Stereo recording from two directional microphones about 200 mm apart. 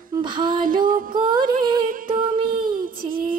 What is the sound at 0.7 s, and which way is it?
Music, 45° right (ahead or behind).